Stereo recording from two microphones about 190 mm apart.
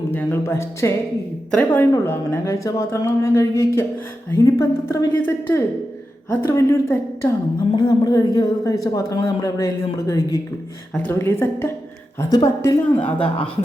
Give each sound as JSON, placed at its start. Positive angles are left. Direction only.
{"t": 0.1, "sound": "a woman's voice", "side_deg": 10}